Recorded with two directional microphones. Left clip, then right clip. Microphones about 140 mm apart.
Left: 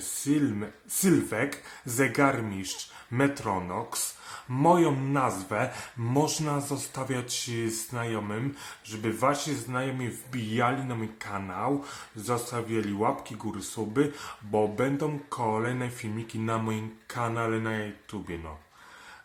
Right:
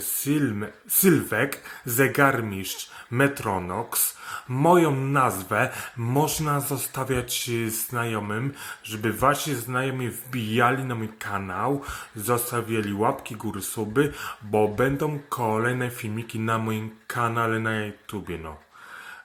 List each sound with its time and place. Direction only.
0.3 s speech: 15° right (ahead or behind)